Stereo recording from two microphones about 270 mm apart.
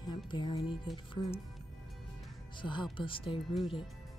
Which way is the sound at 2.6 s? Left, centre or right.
Centre.